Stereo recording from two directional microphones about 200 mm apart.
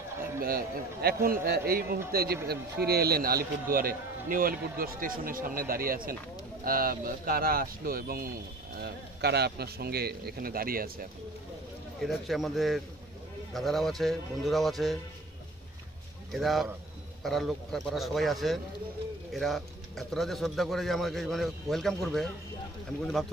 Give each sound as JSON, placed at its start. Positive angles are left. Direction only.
{"t": 0.1, "sound": "a sound", "side_deg": -15}
{"t": 0.4, "sound": "a man's voice", "side_deg": -50}
{"t": 12.0, "sound": "speech", "side_deg": 0}
{"t": 16.3, "sound": "speech", "side_deg": 0}